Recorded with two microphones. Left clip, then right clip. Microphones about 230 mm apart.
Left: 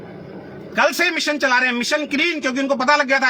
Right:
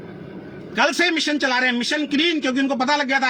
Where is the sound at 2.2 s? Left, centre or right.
Centre.